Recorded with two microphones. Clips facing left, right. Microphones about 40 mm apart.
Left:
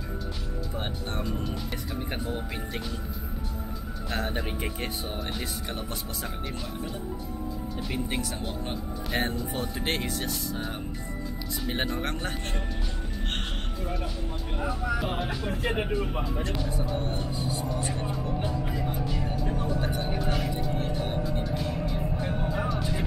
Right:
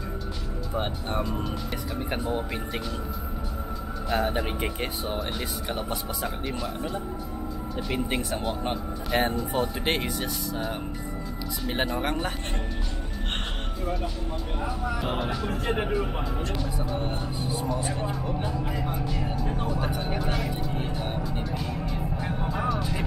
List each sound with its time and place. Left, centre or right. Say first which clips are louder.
1.3 s speech: right 2 dB; centre
4.1 s speech: right 5 dB; centre
7.7 s a man's voice: right 4 dB; centre
9.1 s speech: right 5 dB; centre
11.6 s speech: right 3 dB; centre
14.6 s speech: left 2 dB; centre
18.9 s music: right 1 dB; centre
19.7 s vehicle: even; centre
20.2 s music: even; centre